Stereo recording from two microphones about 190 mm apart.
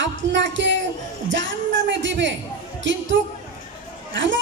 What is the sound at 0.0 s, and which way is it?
Speech, 70° right (ahead or behind).